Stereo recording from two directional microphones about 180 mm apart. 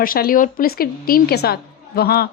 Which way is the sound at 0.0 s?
55° left (ahead or behind).